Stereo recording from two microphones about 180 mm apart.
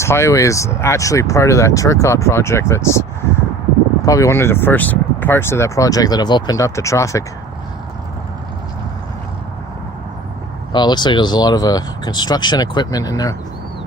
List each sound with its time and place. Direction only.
0.0 s speech: 15° left (ahead or behind)
10.7 s speech: 25° left (ahead or behind)